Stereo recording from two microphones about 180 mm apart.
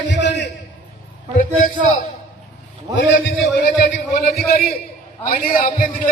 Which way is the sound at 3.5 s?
60° left (ahead or behind).